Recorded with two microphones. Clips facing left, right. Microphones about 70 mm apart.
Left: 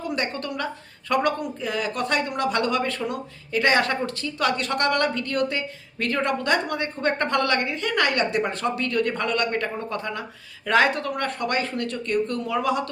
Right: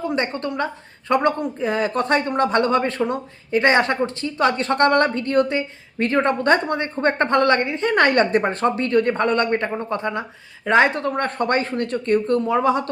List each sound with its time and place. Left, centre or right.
0.0 s a woman's voice: right